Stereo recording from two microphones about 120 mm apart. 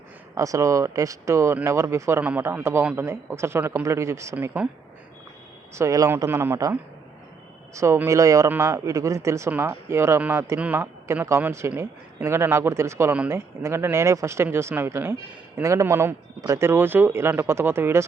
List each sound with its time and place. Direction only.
0.3 s speech: 25° right (ahead or behind)
4.4 s speech: 15° right (ahead or behind)
5.7 s speech: 25° right (ahead or behind)